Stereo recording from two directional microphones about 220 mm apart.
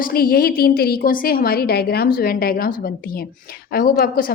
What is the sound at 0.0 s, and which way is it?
A woman's voice, 45° left (ahead or behind).